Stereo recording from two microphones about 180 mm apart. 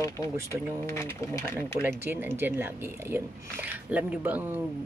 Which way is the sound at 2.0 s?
10° right (ahead or behind).